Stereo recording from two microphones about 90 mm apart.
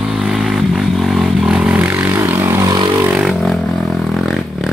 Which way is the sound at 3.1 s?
5° right (ahead or behind).